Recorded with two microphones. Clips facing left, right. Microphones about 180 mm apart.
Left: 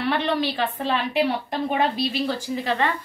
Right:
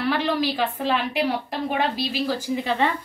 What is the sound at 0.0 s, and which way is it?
A woman's voice, centre (ahead or behind).